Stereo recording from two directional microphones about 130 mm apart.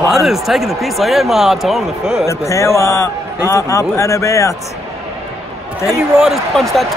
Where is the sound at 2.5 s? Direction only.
20° left (ahead or behind).